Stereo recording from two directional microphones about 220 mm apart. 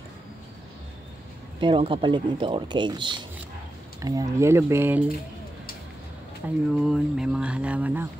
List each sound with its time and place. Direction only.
1.6 s speech: 20° right (ahead or behind)
6.4 s speech: 5° right (ahead or behind)